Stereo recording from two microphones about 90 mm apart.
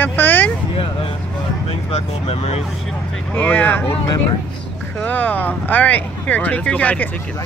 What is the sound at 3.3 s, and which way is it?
Speech, 20° left (ahead or behind).